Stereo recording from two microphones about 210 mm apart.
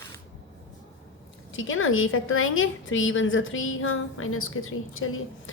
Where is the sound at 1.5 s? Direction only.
65° left (ahead or behind).